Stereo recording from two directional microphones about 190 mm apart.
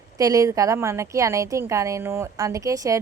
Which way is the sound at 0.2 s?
20° right (ahead or behind).